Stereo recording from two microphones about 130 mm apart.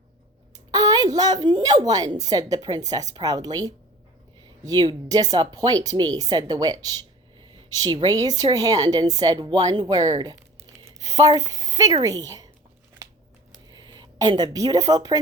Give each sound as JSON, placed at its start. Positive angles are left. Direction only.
{"t": 0.7, "sound": "a woman's voice", "side_deg": -25}
{"t": 13.7, "sound": "speech", "side_deg": -35}